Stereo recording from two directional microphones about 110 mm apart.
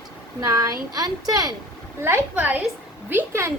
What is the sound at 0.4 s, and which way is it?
Speech, 35° right (ahead or behind).